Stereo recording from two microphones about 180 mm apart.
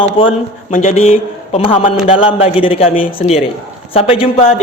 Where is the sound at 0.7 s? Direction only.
40° left (ahead or behind).